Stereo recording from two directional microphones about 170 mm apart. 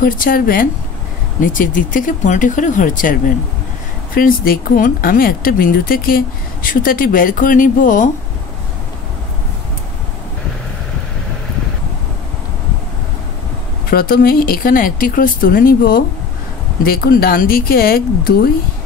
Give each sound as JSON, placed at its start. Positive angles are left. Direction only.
{"t": 0.0, "sound": "speech", "side_deg": 55}
{"t": 13.8, "sound": "speech", "side_deg": 60}